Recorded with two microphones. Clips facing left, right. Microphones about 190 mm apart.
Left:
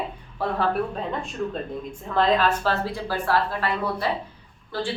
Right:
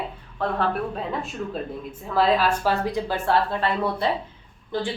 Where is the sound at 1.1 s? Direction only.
5° right (ahead or behind).